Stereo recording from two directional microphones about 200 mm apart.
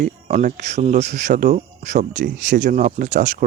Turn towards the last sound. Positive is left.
turn(degrees=-40)  # may be behind; listen again after turning